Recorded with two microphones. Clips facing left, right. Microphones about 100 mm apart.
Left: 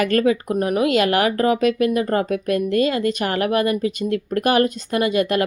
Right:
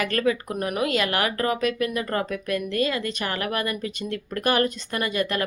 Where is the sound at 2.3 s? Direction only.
45° left (ahead or behind).